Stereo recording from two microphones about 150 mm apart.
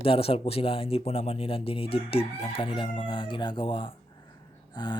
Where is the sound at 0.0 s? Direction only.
40° left (ahead or behind).